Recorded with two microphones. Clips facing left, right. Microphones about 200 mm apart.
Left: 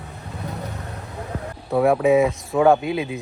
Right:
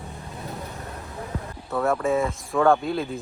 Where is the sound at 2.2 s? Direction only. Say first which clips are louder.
Left 5 dB; 15° left (ahead or behind).